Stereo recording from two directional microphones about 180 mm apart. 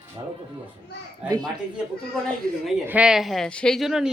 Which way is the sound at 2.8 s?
5° right (ahead or behind).